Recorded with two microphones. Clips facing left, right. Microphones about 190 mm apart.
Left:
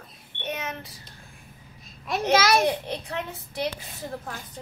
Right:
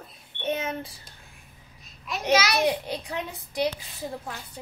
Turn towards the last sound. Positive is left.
turn(degrees=-15)  # may be behind; listen again after turning